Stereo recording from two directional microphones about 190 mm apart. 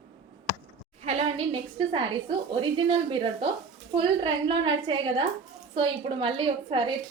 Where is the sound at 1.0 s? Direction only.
35° right (ahead or behind).